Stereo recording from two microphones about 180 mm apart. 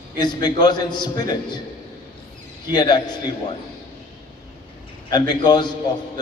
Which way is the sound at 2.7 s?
25° left (ahead or behind).